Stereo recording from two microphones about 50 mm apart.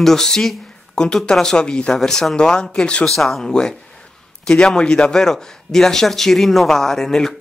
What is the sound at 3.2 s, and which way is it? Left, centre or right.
Speech, centre.